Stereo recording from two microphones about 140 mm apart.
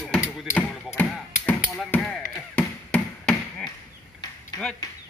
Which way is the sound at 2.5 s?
10° left (ahead or behind).